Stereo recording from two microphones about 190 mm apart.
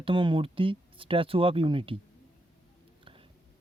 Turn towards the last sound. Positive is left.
turn(degrees=-30)  # may be behind; listen again after turning